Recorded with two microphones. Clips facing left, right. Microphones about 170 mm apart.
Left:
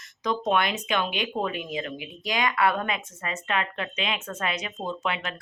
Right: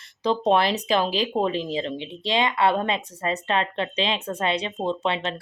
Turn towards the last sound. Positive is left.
turn(degrees=-30)  # may be behind; listen again after turning